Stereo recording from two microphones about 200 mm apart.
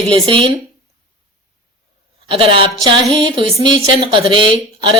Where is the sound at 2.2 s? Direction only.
25° right (ahead or behind).